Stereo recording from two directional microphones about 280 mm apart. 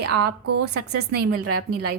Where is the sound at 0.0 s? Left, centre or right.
Right.